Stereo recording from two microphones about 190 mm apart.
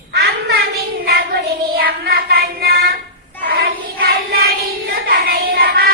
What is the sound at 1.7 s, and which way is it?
Child singing, 55° right (ahead or behind).